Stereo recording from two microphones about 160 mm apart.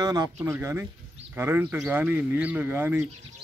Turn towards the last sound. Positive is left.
turn(degrees=-10)  # may be behind; listen again after turning